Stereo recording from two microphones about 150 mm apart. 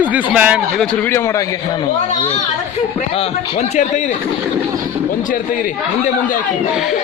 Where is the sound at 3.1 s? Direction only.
50° left (ahead or behind).